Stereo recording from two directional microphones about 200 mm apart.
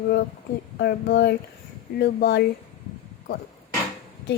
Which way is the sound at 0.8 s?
55° left (ahead or behind).